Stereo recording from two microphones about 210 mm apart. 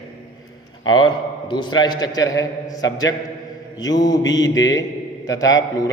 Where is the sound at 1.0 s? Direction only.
20° left (ahead or behind).